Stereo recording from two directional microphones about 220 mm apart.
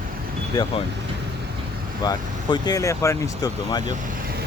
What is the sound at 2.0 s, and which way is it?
Speech, 20° left (ahead or behind).